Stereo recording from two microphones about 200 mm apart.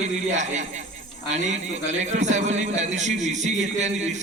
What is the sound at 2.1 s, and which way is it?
A man's voice, 35° right (ahead or behind).